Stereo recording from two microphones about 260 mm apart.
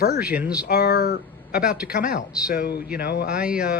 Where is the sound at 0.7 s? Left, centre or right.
Left.